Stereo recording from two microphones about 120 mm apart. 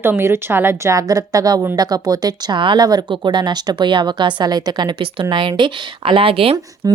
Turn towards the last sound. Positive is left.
turn(degrees=-30)  # may be behind; listen again after turning